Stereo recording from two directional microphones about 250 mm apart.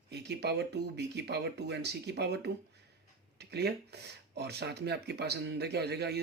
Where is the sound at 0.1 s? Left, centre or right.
Right.